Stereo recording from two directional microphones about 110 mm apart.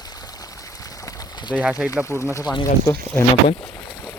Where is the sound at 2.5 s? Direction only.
35° left (ahead or behind).